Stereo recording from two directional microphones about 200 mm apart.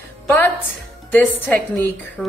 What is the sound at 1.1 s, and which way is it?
A woman's voice, 10° left (ahead or behind).